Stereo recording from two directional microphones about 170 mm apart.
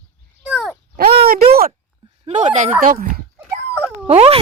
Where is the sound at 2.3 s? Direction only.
45° right (ahead or behind).